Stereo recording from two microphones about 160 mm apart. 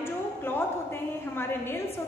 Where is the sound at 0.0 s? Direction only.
15° left (ahead or behind).